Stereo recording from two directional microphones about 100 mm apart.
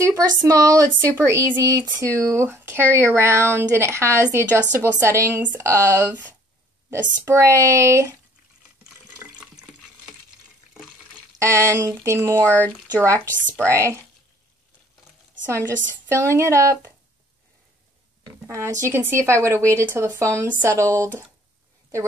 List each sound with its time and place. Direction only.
0.0 s a woman's voice: 35° right (ahead or behind)
11.3 s speech: 30° right (ahead or behind)
12.4 s speech: 15° left (ahead or behind)
13.0 s speech: 30° right (ahead or behind)
15.5 s speech: 30° right (ahead or behind)
18.5 s speech: 30° right (ahead or behind)